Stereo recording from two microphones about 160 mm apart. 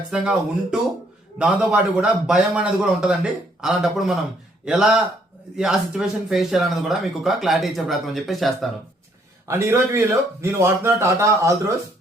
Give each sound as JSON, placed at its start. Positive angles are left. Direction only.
{"t": 0.1, "sound": "speech", "side_deg": -5}
{"t": 9.5, "sound": "speech", "side_deg": -15}